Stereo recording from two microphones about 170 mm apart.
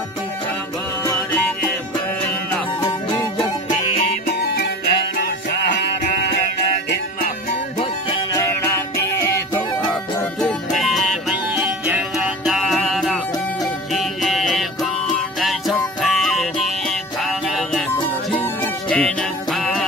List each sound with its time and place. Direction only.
4.6 s music: 70° left (ahead or behind)
10.4 s music: centre (ahead or behind)